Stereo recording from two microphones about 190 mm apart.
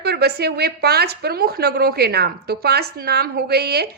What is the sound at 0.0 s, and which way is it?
Speech, 60° right (ahead or behind).